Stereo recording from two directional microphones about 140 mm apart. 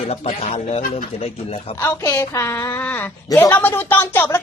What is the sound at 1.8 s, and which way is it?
A woman's voice, 20° left (ahead or behind).